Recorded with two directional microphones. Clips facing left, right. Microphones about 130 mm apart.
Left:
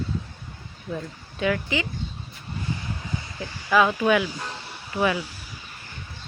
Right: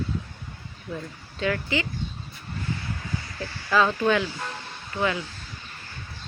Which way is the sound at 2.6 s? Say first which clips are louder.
Left 1 dB; 20° left (ahead or behind).